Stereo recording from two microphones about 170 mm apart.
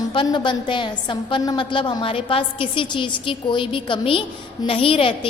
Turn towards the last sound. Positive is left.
turn(degrees=30)  # may be behind; listen again after turning